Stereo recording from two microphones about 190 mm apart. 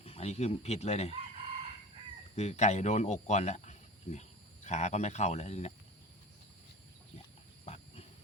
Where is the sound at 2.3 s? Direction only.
35° left (ahead or behind).